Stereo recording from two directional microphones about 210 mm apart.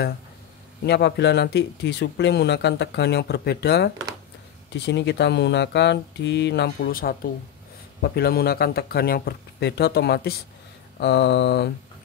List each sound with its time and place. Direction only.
0.8 s speech: 55° left (ahead or behind)